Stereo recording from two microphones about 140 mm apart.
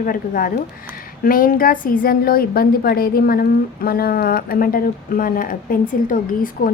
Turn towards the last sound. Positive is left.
turn(degrees=80)